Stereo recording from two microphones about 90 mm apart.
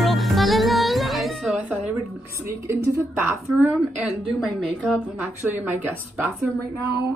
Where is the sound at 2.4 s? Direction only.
25° right (ahead or behind).